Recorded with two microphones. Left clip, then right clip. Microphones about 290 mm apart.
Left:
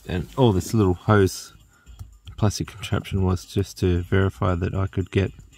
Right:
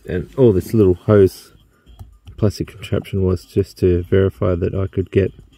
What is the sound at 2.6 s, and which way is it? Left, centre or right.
Speech, centre.